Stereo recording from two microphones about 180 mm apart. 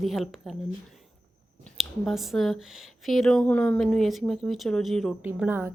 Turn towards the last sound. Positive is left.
turn(degrees=-10)  # may be behind; listen again after turning